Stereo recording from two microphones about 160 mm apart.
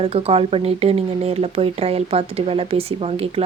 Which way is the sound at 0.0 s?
40° right (ahead or behind).